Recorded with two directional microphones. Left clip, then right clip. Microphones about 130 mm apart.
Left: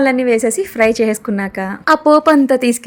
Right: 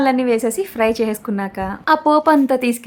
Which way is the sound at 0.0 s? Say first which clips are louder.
Left 3 dB; 10° left (ahead or behind).